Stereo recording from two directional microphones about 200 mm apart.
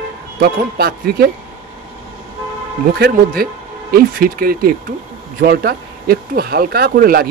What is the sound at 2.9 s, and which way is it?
Speech, 50° right (ahead or behind).